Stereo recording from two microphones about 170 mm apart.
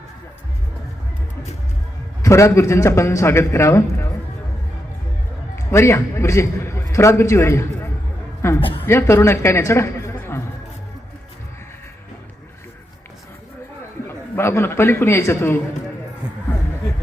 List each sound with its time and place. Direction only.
2.2 s a man's voice: 15° left (ahead or behind)
5.7 s a man's voice: 15° left (ahead or behind)
14.3 s a man's voice: 15° left (ahead or behind)